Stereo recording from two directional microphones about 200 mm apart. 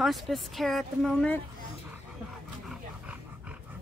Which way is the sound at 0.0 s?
Centre (ahead or behind).